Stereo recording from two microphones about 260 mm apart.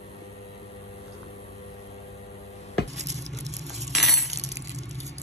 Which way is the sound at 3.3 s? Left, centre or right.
Right.